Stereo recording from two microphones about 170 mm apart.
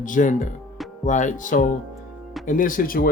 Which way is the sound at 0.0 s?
50° left (ahead or behind).